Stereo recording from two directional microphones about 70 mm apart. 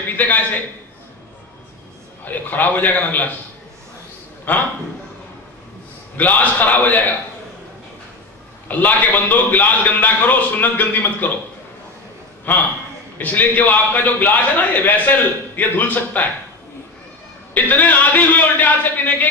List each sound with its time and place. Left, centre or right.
0.2 s a man's voice: left
2.2 s a man's voice: left
4.5 s a man's voice: left
6.1 s a man's voice: left
8.6 s a man's voice: left
12.5 s a man's voice: left
17.6 s a man's voice: left